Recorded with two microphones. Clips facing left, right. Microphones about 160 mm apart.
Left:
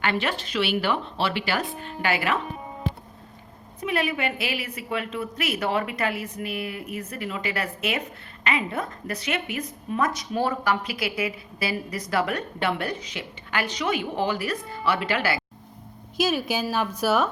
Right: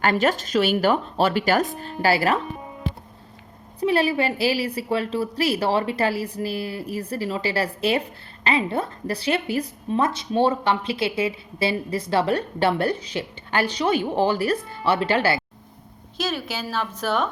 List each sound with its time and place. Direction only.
0.0 s speech: 40° right (ahead or behind)
3.8 s a woman's voice: 30° right (ahead or behind)
16.1 s a woman's voice: 10° left (ahead or behind)